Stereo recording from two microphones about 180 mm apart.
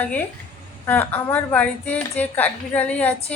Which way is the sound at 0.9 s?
10° left (ahead or behind).